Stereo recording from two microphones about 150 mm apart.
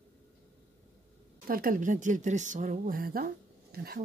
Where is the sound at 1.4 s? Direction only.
70° right (ahead or behind).